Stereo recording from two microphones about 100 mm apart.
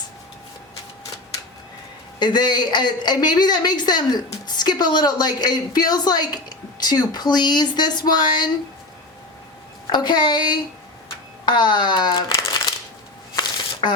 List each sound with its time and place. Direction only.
2.1 s a woman's voice: 45° left (ahead or behind)
9.9 s a woman's voice: 45° left (ahead or behind)
12.5 s a sound: 45° left (ahead or behind)
13.8 s shuffling cards: 50° left (ahead or behind)